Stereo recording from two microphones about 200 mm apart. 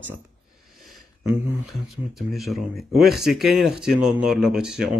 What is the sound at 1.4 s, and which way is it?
Speech, 5° right (ahead or behind).